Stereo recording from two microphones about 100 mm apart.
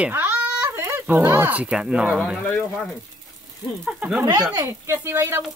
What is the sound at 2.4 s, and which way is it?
Speech, 5° left (ahead or behind).